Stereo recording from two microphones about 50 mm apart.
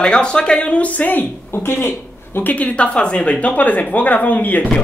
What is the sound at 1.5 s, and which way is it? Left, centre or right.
Speech, left.